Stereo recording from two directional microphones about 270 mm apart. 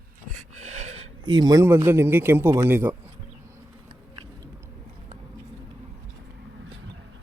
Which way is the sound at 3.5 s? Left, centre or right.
Centre.